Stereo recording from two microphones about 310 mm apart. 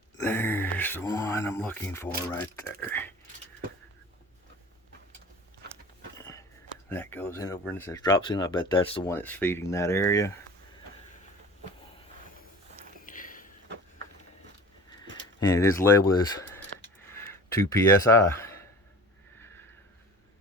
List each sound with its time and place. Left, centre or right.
0.3 s speech: centre
6.1 s biting: centre
6.9 s speech: centre
13.1 s a sound: left
15.4 s speech: centre
17.1 s a sound: centre